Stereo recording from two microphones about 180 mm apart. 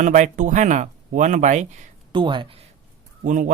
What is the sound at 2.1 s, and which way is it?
Speech, 25° right (ahead or behind).